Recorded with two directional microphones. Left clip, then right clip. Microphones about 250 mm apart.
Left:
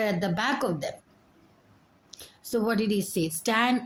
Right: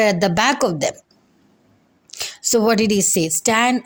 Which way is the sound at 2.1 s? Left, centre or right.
Right.